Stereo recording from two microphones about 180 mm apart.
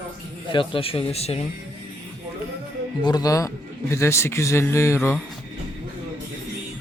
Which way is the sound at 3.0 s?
20° left (ahead or behind).